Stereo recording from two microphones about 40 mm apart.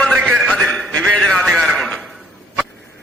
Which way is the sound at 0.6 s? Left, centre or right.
Left.